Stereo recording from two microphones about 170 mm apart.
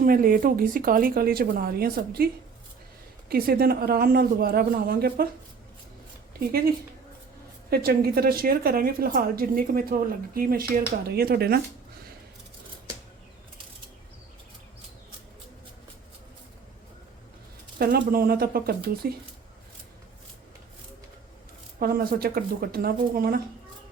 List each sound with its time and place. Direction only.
0.0 s a woman's voice: 55° right (ahead or behind)
7.7 s a woman's voice: 65° right (ahead or behind)
17.7 s a woman's voice: 60° right (ahead or behind)
21.8 s a woman's voice: 60° right (ahead or behind)